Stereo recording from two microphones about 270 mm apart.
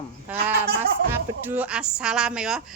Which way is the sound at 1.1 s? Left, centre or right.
Centre.